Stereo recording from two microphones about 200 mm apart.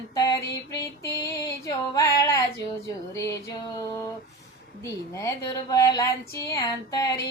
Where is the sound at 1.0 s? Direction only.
15° left (ahead or behind).